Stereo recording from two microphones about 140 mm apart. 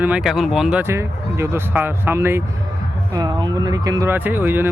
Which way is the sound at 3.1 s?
30° right (ahead or behind).